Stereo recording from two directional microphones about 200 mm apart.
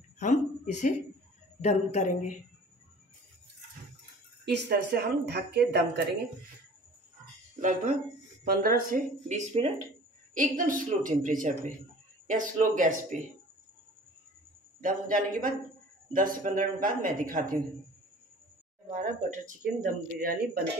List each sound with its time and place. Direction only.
0.2 s a woman's voice: 40° left (ahead or behind)
4.5 s speech: 55° right (ahead or behind)
7.6 s speech: 45° right (ahead or behind)
14.8 s speech: 40° right (ahead or behind)
19.3 s speech: 40° right (ahead or behind)